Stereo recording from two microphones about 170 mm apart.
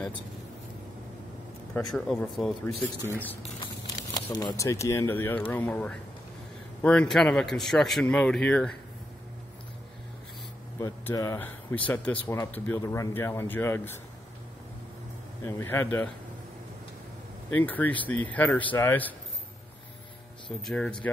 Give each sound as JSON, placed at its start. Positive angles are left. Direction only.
{"t": 1.7, "sound": "speech", "side_deg": 5}
{"t": 3.6, "sound": "speech", "side_deg": 25}
{"t": 10.8, "sound": "speech", "side_deg": 20}
{"t": 15.4, "sound": "speech", "side_deg": 15}
{"t": 17.5, "sound": "speech", "side_deg": 10}
{"t": 20.6, "sound": "speech", "side_deg": 5}